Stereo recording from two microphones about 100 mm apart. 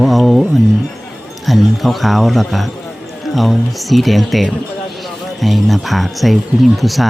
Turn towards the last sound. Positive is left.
turn(degrees=0)  # may be behind; listen again after turning